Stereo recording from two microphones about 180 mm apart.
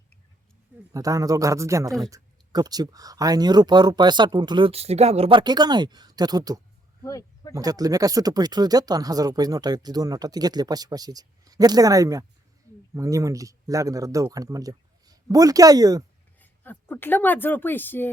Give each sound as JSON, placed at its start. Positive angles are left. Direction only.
{"t": 0.9, "sound": "speech", "side_deg": -20}
{"t": 7.0, "sound": "a sound", "side_deg": 20}
{"t": 7.5, "sound": "speech", "side_deg": -20}
{"t": 16.4, "sound": "speech", "side_deg": 10}